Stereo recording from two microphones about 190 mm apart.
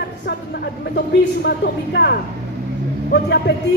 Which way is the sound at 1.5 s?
55° left (ahead or behind).